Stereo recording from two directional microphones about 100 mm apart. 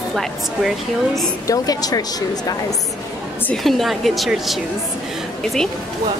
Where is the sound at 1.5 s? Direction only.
40° left (ahead or behind).